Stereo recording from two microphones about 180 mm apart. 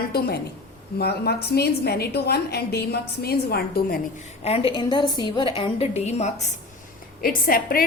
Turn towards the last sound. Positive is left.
turn(degrees=55)  # may be behind; listen again after turning